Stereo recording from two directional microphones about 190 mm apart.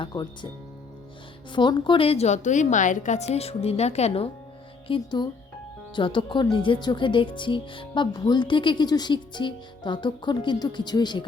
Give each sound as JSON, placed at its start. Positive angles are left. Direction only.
{"t": 0.0, "sound": "speech", "side_deg": 20}
{"t": 1.5, "sound": "a woman's voice", "side_deg": 25}